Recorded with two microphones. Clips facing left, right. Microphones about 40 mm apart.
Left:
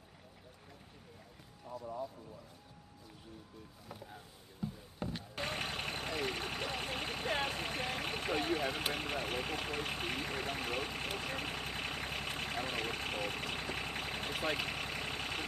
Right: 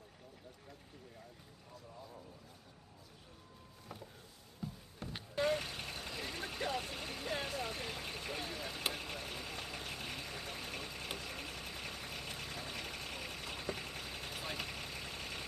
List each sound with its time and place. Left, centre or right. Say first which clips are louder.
4.6 s music: left 5 dB; centre
5.3 s vehicle: right 6 dB; left